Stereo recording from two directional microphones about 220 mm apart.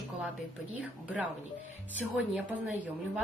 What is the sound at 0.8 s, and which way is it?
Speech, 5° right (ahead or behind).